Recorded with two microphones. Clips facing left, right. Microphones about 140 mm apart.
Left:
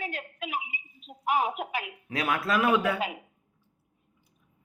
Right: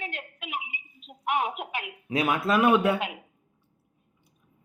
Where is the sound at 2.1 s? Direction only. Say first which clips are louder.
Right 3 dB; 25° right (ahead or behind).